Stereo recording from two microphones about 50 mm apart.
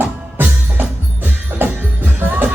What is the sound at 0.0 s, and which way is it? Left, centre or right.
Music, right.